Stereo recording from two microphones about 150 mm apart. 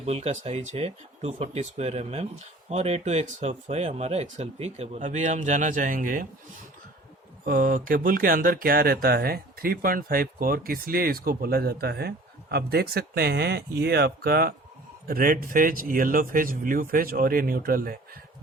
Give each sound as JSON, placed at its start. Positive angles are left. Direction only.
{"t": 0.0, "sound": "speech", "side_deg": -45}
{"t": 7.4, "sound": "speech", "side_deg": -70}
{"t": 15.0, "sound": "speech", "side_deg": -70}